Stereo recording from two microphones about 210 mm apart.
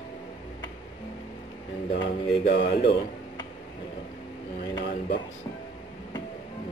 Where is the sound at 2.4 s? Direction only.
50° left (ahead or behind).